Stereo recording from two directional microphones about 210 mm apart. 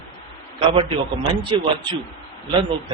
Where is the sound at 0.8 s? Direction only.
25° right (ahead or behind).